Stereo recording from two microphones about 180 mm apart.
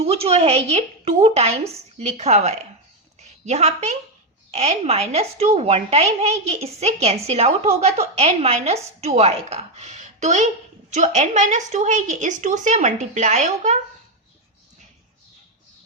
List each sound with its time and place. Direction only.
0.0 s a woman's voice: 35° right (ahead or behind)
3.2 s a sound: 40° right (ahead or behind)
4.5 s a woman's voice: 35° right (ahead or behind)